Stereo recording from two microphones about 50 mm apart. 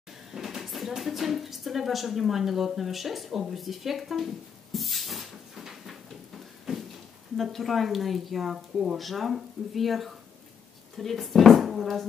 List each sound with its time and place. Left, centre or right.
0.3 s speech: centre
4.7 s a sound: centre
7.3 s a woman's voice: centre